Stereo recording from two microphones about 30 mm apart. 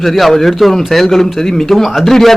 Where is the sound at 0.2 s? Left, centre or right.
Centre.